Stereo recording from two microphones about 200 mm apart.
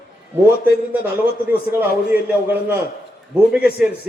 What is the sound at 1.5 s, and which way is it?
A man's voice, 10° right (ahead or behind).